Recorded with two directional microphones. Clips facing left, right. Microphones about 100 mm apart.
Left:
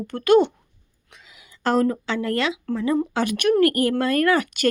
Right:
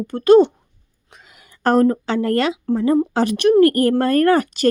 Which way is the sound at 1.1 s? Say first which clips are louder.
Right 2 dB; 50° right (ahead or behind).